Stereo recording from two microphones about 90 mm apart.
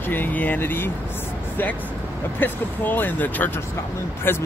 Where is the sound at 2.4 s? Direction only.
20° left (ahead or behind).